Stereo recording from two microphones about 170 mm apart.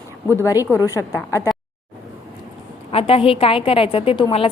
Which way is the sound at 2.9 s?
35° left (ahead or behind).